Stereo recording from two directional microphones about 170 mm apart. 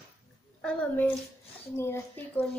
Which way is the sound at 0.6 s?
5° left (ahead or behind).